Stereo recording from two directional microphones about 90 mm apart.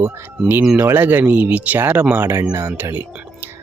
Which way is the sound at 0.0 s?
20° right (ahead or behind).